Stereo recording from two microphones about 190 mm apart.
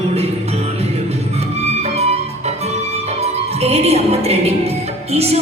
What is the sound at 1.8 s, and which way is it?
Music, 35° right (ahead or behind).